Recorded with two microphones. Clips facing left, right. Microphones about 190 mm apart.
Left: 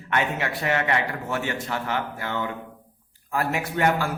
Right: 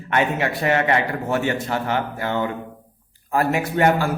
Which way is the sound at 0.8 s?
35° right (ahead or behind).